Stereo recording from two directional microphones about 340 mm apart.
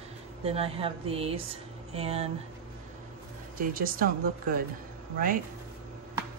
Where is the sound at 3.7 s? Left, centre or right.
Right.